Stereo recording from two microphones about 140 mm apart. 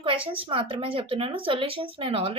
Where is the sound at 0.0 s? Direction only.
40° right (ahead or behind).